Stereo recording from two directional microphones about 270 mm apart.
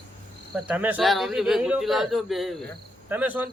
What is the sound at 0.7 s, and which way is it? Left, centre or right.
A man's voice, centre.